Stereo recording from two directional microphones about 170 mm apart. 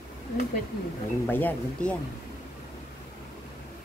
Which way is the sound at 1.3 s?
10° left (ahead or behind).